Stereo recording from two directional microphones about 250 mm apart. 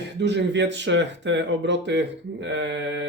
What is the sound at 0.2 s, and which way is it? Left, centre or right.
Speech, right.